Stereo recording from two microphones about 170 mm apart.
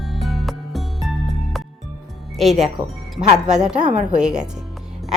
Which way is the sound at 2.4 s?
Centre (ahead or behind).